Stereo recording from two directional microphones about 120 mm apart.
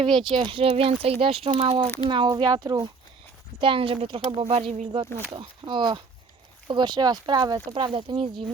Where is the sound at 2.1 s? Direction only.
40° right (ahead or behind).